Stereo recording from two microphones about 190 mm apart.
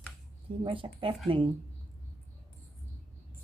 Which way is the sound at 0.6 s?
25° right (ahead or behind).